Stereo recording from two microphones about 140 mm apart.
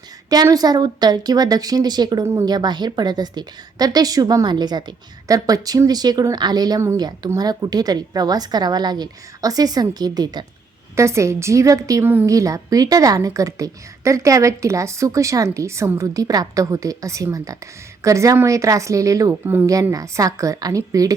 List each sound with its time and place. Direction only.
0.3 s a woman's voice: 25° right (ahead or behind)